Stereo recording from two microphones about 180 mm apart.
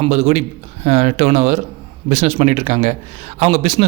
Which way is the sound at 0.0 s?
35° right (ahead or behind).